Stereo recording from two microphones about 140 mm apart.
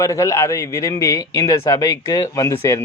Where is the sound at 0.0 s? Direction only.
20° left (ahead or behind).